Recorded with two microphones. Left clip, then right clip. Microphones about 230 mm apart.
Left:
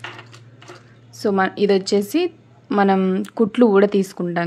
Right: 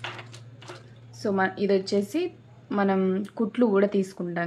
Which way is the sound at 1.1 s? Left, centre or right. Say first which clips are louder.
Left 6 dB; left.